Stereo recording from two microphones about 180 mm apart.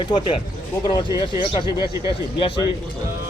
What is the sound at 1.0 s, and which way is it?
Speech, 20° right (ahead or behind).